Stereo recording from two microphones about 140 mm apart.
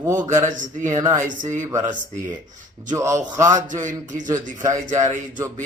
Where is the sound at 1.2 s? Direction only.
65° right (ahead or behind).